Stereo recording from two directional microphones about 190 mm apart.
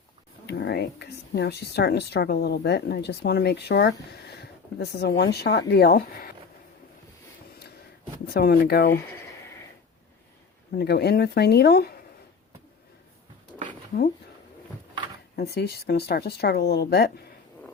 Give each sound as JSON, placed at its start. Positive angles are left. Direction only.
{"t": 0.4, "sound": "speech", "side_deg": 60}
{"t": 8.3, "sound": "speech", "side_deg": 55}
{"t": 10.8, "sound": "speech", "side_deg": 55}
{"t": 15.4, "sound": "speech", "side_deg": 60}